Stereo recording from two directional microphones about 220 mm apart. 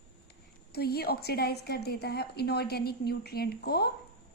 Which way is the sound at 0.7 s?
45° left (ahead or behind).